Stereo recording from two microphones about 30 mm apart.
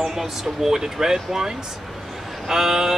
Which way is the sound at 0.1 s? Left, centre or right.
Centre.